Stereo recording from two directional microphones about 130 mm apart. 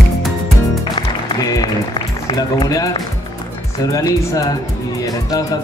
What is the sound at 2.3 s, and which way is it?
Speech, 25° left (ahead or behind).